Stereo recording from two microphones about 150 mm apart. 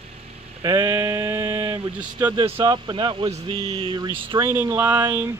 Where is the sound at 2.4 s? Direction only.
35° right (ahead or behind).